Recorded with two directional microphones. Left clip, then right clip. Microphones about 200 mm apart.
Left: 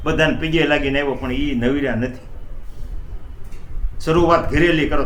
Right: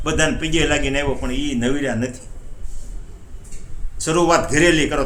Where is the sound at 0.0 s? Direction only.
15° right (ahead or behind).